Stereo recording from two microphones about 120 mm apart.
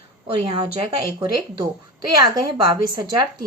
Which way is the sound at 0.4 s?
45° right (ahead or behind).